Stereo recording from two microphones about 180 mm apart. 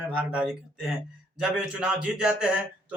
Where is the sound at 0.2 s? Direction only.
5° right (ahead or behind).